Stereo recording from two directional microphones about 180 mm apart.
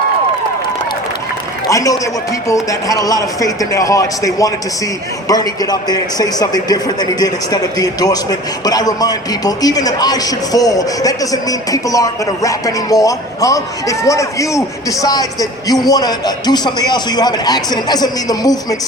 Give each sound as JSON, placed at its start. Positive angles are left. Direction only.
{"t": 1.7, "sound": "a man's voice", "side_deg": 20}
{"t": 5.3, "sound": "a man's voice", "side_deg": 20}